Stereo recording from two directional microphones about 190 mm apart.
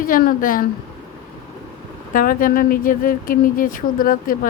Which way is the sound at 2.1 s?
45° left (ahead or behind).